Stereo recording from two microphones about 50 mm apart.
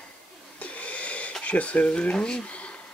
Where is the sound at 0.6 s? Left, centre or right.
Left.